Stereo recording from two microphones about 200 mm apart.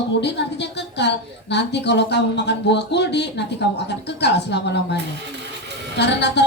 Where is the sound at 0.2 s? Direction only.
60° left (ahead or behind).